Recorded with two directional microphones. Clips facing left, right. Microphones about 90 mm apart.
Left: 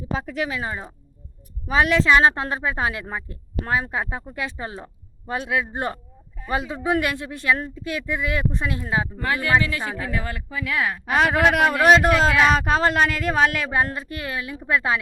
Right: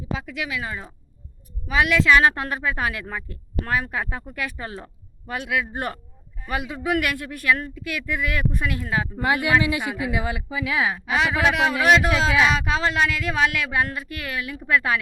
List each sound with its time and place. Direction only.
0.1 s speech: 40° left (ahead or behind)
9.1 s speech: 15° right (ahead or behind)
11.0 s speech: 45° left (ahead or behind); by 14.9 s 25° left (ahead or behind)